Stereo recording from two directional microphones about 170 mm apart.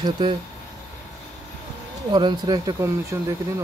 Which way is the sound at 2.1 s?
25° right (ahead or behind).